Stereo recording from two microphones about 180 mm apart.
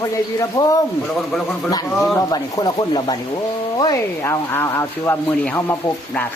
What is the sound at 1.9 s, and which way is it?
Speech, centre (ahead or behind).